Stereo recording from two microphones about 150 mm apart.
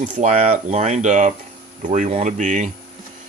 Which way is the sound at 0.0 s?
55° right (ahead or behind).